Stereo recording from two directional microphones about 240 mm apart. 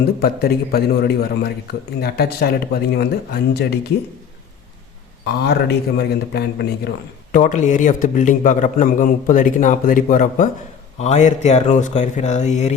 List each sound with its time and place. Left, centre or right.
0.2 s a man's voice: left
5.2 s a man's voice: left
7.3 s a man's voice: left